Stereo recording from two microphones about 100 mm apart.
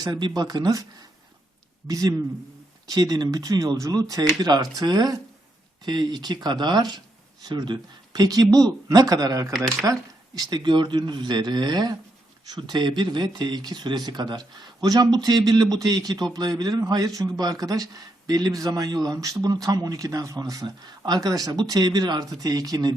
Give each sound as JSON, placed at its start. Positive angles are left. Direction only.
{"t": 0.0, "sound": "a man's voice", "side_deg": -45}
{"t": 1.9, "sound": "a man's voice", "side_deg": -35}